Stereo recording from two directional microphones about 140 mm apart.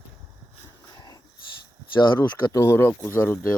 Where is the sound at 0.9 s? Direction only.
30° left (ahead or behind).